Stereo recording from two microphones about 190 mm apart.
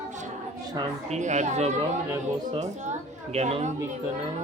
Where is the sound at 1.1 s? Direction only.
40° right (ahead or behind).